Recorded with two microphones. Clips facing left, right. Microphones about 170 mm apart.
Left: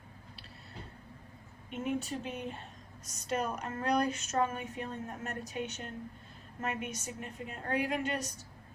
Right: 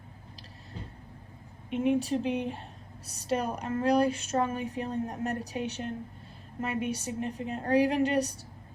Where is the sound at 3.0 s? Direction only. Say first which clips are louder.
Right 4 dB; 35° right (ahead or behind).